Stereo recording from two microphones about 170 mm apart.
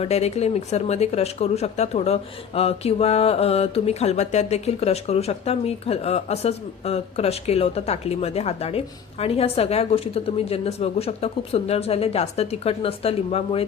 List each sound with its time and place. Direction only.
0.0 s mantra: 40° left (ahead or behind)